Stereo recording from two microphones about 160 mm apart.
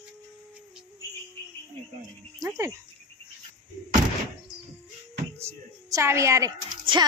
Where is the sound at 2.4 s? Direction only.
20° right (ahead or behind).